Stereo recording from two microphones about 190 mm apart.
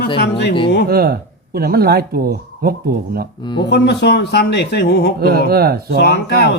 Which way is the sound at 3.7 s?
60° left (ahead or behind).